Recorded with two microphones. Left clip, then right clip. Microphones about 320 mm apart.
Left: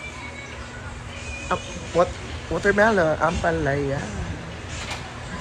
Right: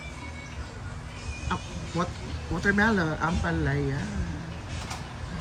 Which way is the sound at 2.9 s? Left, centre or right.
Left.